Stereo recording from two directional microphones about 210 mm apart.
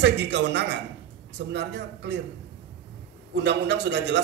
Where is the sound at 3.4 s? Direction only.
55° right (ahead or behind).